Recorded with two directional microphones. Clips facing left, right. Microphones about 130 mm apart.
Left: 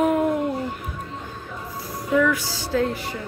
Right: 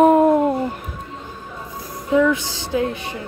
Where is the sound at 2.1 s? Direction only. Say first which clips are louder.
Right 4 dB; 20° right (ahead or behind).